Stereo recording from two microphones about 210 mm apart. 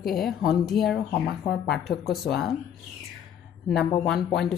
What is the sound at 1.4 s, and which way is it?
Speech, 50° left (ahead or behind).